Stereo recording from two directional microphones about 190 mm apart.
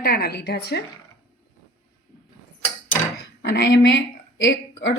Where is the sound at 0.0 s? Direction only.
55° left (ahead or behind).